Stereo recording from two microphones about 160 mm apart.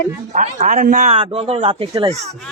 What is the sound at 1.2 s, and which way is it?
Speech, 35° right (ahead or behind).